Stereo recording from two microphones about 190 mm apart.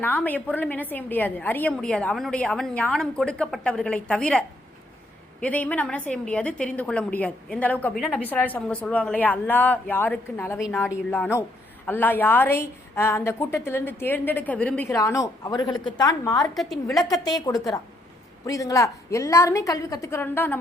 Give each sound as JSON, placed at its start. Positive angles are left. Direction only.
{"t": 0.0, "sound": "a woman's voice", "side_deg": 10}